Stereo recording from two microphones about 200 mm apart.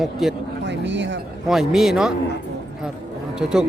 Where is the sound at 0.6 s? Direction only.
60° right (ahead or behind).